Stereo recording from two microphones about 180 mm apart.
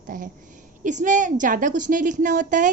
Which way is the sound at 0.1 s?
50° right (ahead or behind).